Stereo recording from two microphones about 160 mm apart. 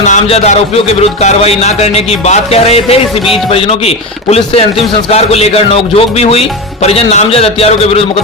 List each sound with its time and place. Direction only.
0.1 s a man's voice: 45° left (ahead or behind)
1.2 s music: 45° left (ahead or behind)